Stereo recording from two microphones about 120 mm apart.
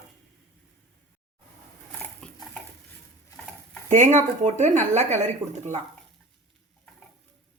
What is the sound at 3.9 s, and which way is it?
Speech, 80° right.